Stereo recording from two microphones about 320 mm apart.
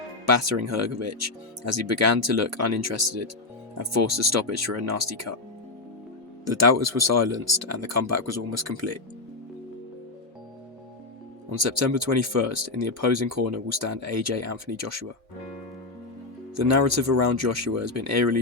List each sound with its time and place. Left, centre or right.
0.3 s speech: right
6.4 s speech: right
11.5 s speech: right
16.6 s speech: right